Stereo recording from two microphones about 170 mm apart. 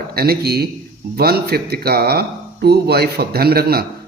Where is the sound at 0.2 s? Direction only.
65° right (ahead or behind).